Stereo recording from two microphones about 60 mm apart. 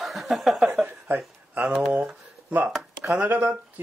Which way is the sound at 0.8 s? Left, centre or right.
Right.